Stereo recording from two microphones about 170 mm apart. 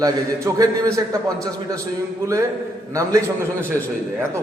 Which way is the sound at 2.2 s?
15° right (ahead or behind).